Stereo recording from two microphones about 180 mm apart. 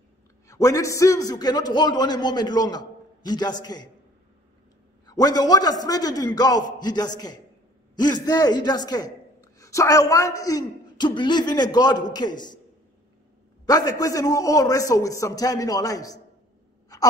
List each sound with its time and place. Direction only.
0.5 s a man's voice: 15° left (ahead or behind)
5.0 s a man's voice: 20° left (ahead or behind)
13.7 s a man's voice: 20° left (ahead or behind)